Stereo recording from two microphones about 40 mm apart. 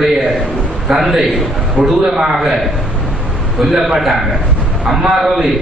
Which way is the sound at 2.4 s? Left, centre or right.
Centre.